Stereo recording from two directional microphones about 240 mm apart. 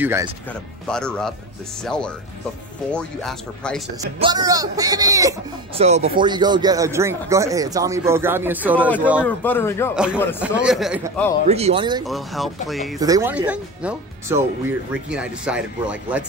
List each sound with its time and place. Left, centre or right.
0.0 s speech: centre
0.5 s speech: centre
4.0 s speech: centre
5.8 s speech: right; by 8.9 s centre
9.2 s speech: centre
9.9 s speech: centre
11.4 s speech: right
12.1 s speech: centre
13.0 s speech: centre